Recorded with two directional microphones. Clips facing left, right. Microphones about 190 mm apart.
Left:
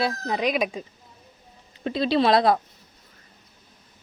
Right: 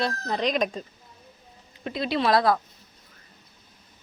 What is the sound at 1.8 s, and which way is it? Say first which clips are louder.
Speech: left 4 dB; 30° left (ahead or behind).